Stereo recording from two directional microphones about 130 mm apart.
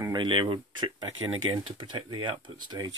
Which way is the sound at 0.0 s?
35° right (ahead or behind).